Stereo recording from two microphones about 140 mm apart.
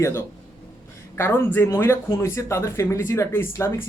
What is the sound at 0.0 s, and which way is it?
Speech, 20° left (ahead or behind).